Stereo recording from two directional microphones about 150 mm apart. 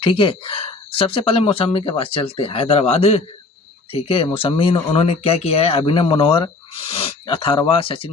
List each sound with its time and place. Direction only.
0.0 s speech: 35° left (ahead or behind)